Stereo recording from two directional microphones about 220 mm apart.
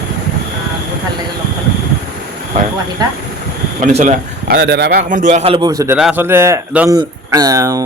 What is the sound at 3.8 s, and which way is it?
Speech, 35° right (ahead or behind).